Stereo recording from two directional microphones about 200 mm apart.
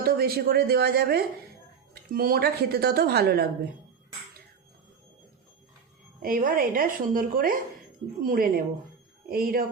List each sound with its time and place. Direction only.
0.0 s a woman's voice: 50° right (ahead or behind)
6.2 s a woman's voice: 45° right (ahead or behind)